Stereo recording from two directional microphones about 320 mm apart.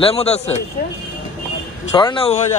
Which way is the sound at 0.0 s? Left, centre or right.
Centre.